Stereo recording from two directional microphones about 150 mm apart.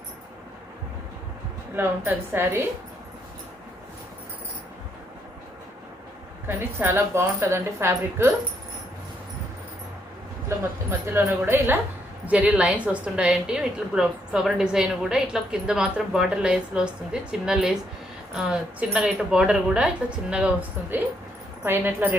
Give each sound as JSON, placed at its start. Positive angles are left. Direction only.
{"t": 1.7, "sound": "speech", "side_deg": -15}
{"t": 6.6, "sound": "speech", "side_deg": -15}
{"t": 10.5, "sound": "a woman's voice", "side_deg": -15}